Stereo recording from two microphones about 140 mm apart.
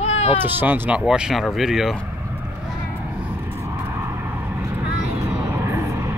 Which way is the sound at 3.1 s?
10° right (ahead or behind).